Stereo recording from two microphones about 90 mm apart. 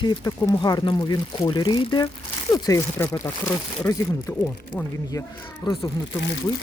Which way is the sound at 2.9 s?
30° left (ahead or behind).